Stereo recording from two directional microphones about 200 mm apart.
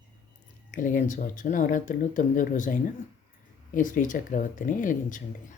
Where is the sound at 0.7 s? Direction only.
40° left (ahead or behind).